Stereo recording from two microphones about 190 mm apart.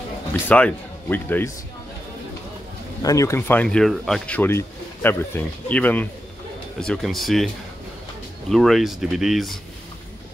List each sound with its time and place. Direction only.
0.3 s speech: 5° left (ahead or behind)
3.0 s speech: 15° left (ahead or behind); by 9.6 s centre (ahead or behind)